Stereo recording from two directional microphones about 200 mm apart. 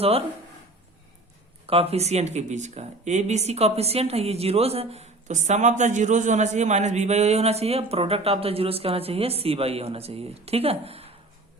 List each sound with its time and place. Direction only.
1.6 s speech: 30° right (ahead or behind)